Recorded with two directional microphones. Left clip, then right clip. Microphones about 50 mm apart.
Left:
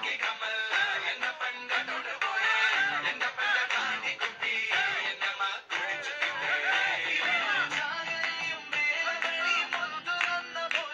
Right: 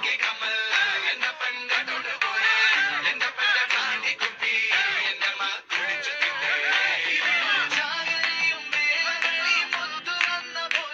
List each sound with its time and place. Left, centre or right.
0.0 s music: right
7.7 s music: right
8.4 s music: right